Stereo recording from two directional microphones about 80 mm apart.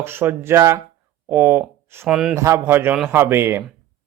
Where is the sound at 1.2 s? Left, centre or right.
Right.